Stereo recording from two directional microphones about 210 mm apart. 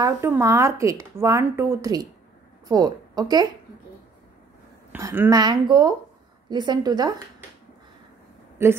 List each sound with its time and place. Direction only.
0.0 s a woman's voice: 15° right (ahead or behind)
4.9 s a woman's voice: 10° right (ahead or behind)
8.6 s speech: 10° right (ahead or behind)